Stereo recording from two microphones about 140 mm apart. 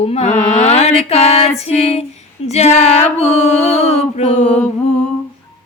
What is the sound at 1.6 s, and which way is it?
Female singing, 45° left (ahead or behind).